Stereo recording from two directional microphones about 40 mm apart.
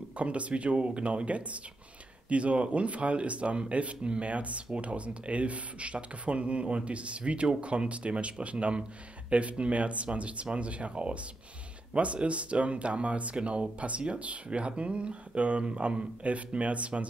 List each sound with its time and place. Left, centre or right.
0.2 s speech: right